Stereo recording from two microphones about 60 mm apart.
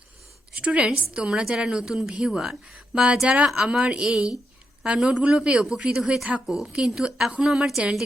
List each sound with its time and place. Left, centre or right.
0.5 s a woman's voice: centre